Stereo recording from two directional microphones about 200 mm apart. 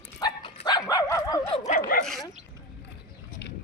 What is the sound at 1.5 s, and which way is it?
Speech, 40° left (ahead or behind).